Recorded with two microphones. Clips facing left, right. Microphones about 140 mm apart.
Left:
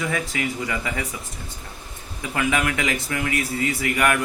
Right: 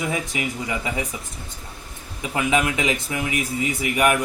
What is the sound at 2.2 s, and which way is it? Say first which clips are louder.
Speech: right 2 dB; 20° right (ahead or behind).